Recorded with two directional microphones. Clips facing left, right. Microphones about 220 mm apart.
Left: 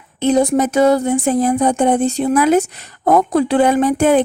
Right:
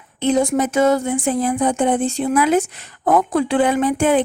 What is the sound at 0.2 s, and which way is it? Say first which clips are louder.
Speech: left 3 dB; 40° left (ahead or behind).